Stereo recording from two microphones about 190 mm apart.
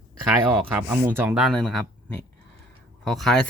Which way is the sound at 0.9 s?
10° right (ahead or behind).